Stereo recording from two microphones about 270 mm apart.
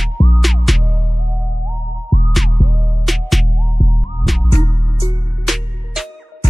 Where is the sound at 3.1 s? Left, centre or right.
Centre.